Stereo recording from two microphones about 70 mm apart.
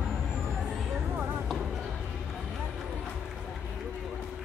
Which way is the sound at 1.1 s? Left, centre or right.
Right.